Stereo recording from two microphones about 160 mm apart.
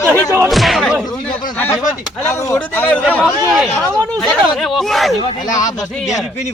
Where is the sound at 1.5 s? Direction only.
10° left (ahead or behind).